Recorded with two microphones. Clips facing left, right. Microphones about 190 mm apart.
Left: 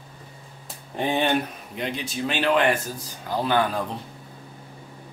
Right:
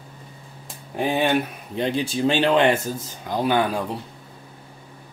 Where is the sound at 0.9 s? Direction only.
5° right (ahead or behind).